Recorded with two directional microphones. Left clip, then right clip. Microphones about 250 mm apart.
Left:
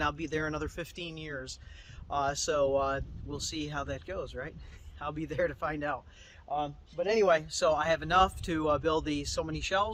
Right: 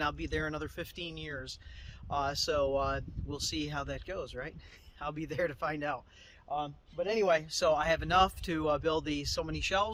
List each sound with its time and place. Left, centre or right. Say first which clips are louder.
0.0 s speech: left 2 dB; centre